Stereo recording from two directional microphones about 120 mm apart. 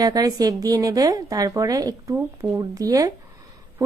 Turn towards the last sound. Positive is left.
turn(degrees=-30)  # may be behind; listen again after turning